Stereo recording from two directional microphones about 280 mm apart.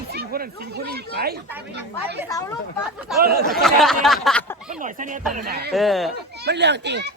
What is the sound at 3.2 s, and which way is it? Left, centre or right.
Speech, right.